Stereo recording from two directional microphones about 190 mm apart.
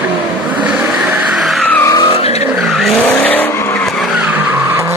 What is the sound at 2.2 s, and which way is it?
Vehicle, 35° left (ahead or behind).